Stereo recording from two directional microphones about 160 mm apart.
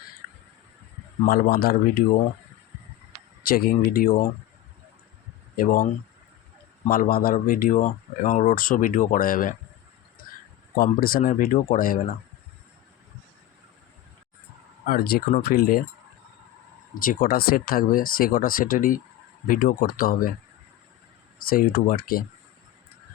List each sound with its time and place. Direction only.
1.3 s speech: 70° left (ahead or behind)
3.4 s speech: 70° left (ahead or behind)
5.5 s speech: 60° left (ahead or behind)
10.8 s speech: 65° left (ahead or behind)
14.8 s speech: 70° left (ahead or behind)
16.9 s speech: 60° left (ahead or behind)
21.3 s speech: 65° left (ahead or behind)